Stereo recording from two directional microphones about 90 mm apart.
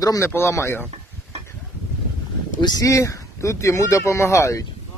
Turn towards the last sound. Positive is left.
turn(degrees=35)  # may be behind; listen again after turning